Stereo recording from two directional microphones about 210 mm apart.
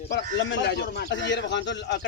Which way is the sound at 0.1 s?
60° left (ahead or behind).